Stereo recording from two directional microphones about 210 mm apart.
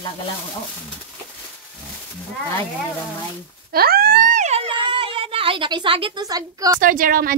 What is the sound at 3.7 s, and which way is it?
A child's voice, 45° right (ahead or behind).